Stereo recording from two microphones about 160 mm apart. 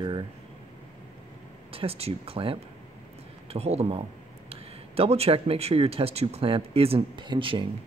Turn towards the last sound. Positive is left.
turn(degrees=-30)  # may be behind; listen again after turning